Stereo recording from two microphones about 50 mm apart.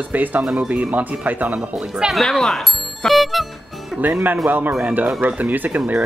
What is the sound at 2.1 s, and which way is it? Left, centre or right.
Music, centre.